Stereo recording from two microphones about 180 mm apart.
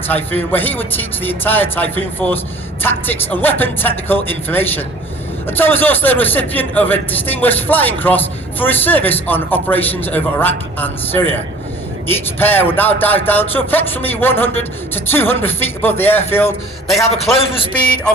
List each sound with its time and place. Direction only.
0.1 s a man's voice: 10° left (ahead or behind)
17.4 s a man's voice: 30° left (ahead or behind)